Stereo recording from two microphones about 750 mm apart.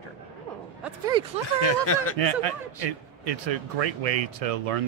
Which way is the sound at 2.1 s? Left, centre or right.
Right.